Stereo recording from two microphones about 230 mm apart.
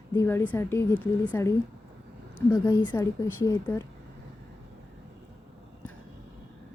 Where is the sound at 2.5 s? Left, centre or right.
Centre.